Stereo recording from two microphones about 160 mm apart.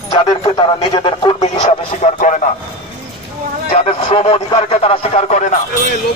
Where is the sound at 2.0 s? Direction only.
50° left (ahead or behind).